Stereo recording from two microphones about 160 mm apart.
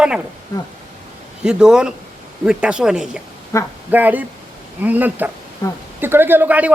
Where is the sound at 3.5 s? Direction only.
15° left (ahead or behind).